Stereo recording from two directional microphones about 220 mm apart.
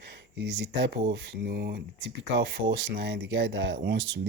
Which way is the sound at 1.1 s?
50° right (ahead or behind).